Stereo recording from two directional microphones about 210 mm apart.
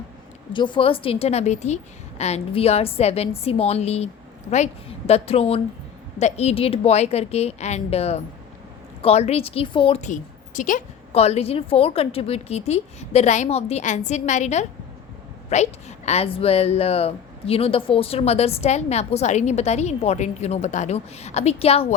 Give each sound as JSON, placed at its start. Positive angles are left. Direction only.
{"t": 0.5, "sound": "a woman's voice", "side_deg": 25}